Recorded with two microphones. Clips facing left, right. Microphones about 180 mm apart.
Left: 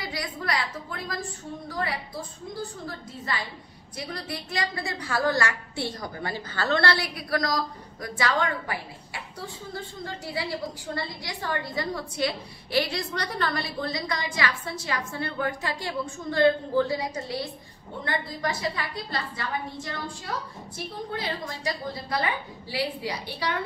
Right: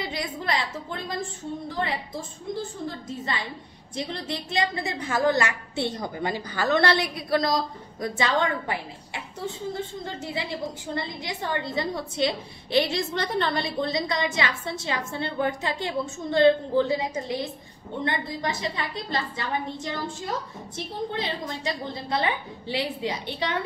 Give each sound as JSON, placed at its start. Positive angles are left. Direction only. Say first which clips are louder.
{"t": 0.0, "sound": "a woman's voice", "louder": "right 2 dB", "side_deg": -25}
{"t": 3.3, "sound": "a woman's voice", "louder": "right 1 dB", "side_deg": -25}